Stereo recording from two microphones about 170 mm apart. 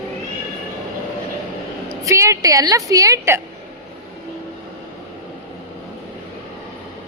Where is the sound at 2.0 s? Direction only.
20° right (ahead or behind).